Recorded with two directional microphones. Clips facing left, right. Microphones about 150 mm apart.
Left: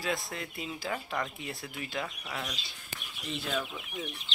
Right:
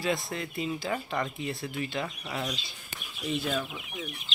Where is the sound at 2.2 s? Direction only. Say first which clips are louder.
Right 4 dB; 5° right (ahead or behind).